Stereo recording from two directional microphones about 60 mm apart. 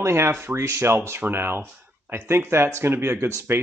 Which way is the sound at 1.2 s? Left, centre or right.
Right.